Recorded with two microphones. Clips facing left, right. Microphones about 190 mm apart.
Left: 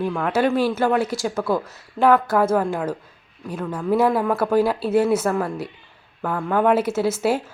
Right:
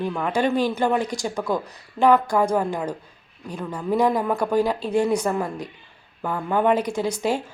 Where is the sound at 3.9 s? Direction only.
5° left (ahead or behind).